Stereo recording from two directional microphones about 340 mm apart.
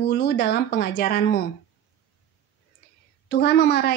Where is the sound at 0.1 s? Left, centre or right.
Left.